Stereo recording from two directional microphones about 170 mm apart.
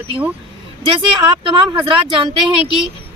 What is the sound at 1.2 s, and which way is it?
Speech, 30° right (ahead or behind).